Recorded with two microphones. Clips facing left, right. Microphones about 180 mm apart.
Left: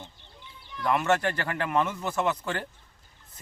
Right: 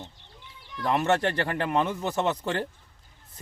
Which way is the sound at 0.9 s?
30° right (ahead or behind).